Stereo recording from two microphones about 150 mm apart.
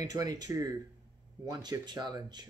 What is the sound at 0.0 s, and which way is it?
Speech, 25° right (ahead or behind).